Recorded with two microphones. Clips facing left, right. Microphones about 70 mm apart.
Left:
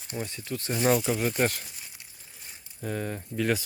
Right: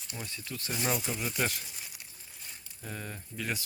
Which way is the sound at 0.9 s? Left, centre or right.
Left.